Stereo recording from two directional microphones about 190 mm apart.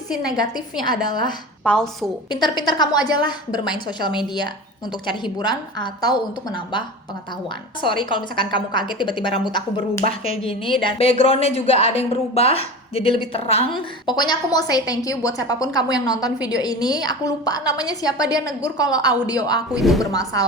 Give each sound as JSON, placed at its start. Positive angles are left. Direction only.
{"t": 0.3, "sound": "speech", "side_deg": 20}
{"t": 1.6, "sound": "a woman's voice", "side_deg": 5}
{"t": 2.3, "sound": "speech", "side_deg": 25}